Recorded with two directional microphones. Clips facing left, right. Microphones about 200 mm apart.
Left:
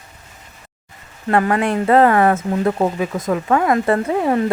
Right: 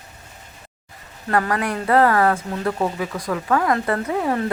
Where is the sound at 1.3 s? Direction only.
25° left (ahead or behind).